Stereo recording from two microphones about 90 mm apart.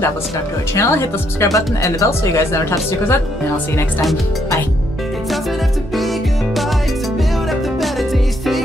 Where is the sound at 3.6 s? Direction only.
20° left (ahead or behind).